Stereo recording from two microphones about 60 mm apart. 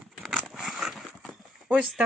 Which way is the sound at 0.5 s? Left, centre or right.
Centre.